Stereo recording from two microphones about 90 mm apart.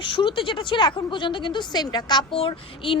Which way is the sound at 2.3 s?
80° left.